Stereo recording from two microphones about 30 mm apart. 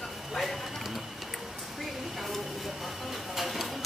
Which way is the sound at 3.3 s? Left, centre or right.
Centre.